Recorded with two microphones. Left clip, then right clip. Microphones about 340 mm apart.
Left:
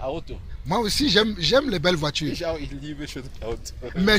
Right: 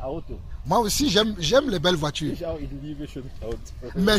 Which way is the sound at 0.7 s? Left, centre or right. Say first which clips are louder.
Right 1 dB; centre.